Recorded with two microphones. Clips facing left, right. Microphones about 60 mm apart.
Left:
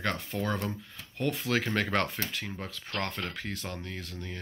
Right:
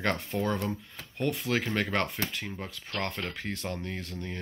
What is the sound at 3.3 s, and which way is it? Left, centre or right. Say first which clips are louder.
Speech: right 2 dB; right.